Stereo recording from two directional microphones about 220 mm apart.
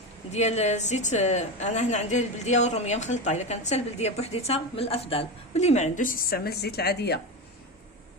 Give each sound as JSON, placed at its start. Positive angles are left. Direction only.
{"t": 0.3, "sound": "a woman's voice", "side_deg": 30}